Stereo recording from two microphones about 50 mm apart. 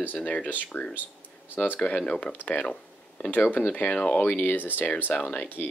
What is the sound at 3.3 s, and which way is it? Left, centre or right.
Speech, left.